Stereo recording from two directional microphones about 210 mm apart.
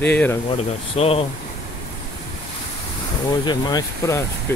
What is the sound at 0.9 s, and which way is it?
Speech, 30° left (ahead or behind).